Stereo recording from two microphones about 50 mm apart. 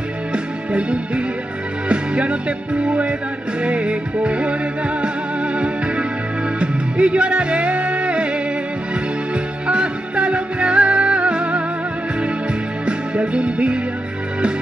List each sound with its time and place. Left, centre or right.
0.3 s music: right
12.8 s music: right